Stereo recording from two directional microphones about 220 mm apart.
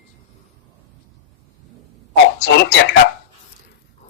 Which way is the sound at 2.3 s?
50° left (ahead or behind).